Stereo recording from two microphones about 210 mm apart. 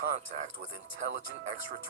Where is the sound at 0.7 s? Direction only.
60° right (ahead or behind).